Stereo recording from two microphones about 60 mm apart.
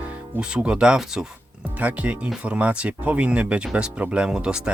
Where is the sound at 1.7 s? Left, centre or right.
Right.